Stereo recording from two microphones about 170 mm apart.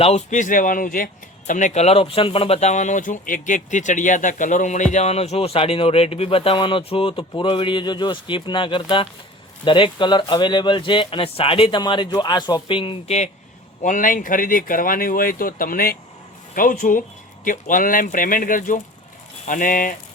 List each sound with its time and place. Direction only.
0.0 s speech: 40° left (ahead or behind)
13.8 s speech: 50° left (ahead or behind)